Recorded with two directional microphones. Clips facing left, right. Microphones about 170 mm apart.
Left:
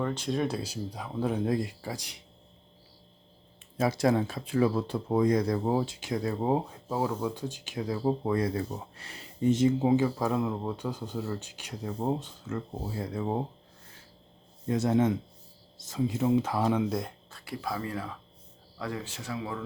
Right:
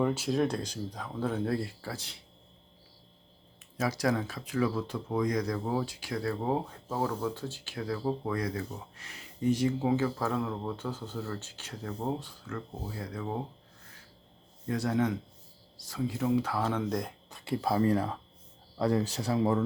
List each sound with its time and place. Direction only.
0.0 s speech: 5° right (ahead or behind); by 2.2 s 15° left (ahead or behind)
3.8 s speech: 25° left (ahead or behind)
14.7 s speech: 25° left (ahead or behind)
17.3 s speech: 25° right (ahead or behind)